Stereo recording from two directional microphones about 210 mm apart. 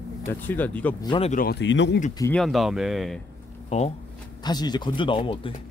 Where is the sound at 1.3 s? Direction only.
45° left (ahead or behind).